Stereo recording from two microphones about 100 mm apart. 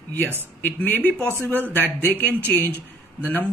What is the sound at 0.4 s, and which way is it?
Speech, 20° left (ahead or behind).